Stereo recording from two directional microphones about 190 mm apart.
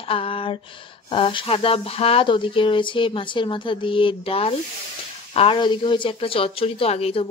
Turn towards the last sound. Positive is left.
turn(degrees=30)  # may be behind; listen again after turning